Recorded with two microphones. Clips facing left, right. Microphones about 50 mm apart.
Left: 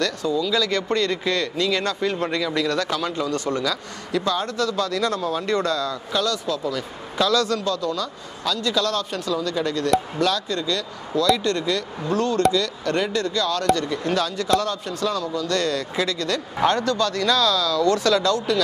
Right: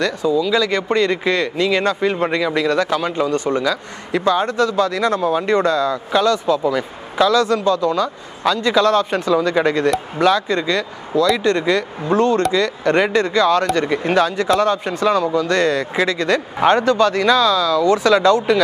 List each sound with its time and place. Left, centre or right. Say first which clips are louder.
0.0 s speech: right 5 dB; centre